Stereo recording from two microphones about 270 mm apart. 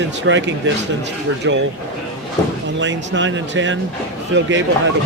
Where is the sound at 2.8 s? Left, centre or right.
Right.